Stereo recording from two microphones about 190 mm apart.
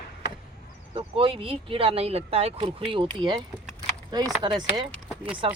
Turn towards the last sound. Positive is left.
turn(degrees=-5)  # may be behind; listen again after turning